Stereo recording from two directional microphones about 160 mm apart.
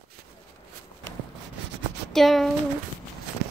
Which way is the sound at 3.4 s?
90° right.